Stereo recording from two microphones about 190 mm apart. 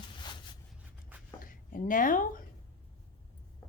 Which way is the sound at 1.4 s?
45° left (ahead or behind).